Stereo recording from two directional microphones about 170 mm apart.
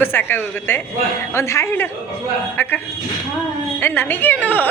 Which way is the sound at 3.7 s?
10° left (ahead or behind).